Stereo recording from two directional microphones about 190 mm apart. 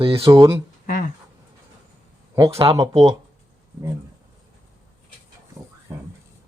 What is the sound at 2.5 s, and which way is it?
Speech, 30° right (ahead or behind).